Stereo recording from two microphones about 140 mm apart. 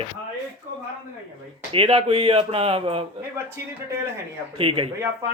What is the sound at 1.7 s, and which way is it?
Speech, 40° right (ahead or behind).